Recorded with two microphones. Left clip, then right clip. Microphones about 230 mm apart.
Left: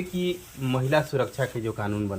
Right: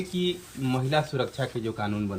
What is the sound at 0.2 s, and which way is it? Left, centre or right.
Speech, centre.